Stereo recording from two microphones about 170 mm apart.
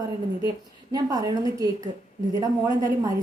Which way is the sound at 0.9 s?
20° right (ahead or behind).